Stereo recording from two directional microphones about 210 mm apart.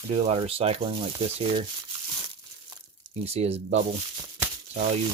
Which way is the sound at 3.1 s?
30° right (ahead or behind).